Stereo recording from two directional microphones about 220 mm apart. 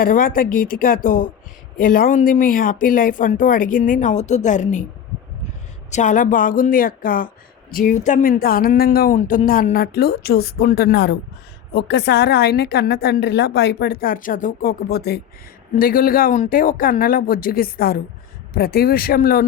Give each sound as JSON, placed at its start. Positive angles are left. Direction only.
{"t": 0.0, "sound": "speech", "side_deg": 40}
{"t": 5.9, "sound": "a woman's voice", "side_deg": 35}